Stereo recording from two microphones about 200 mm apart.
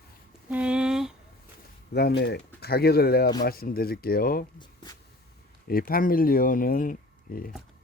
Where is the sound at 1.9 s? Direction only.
55° left (ahead or behind).